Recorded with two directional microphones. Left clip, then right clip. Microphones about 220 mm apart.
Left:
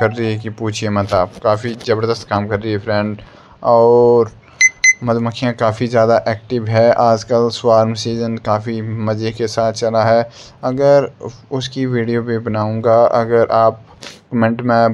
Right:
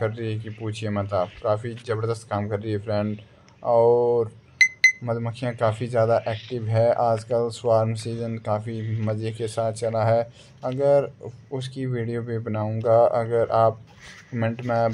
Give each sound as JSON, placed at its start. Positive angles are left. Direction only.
{"t": 0.0, "sound": "speech", "side_deg": 15}
{"t": 4.6, "sound": "a sound", "side_deg": 0}
{"t": 5.0, "sound": "speech", "side_deg": 15}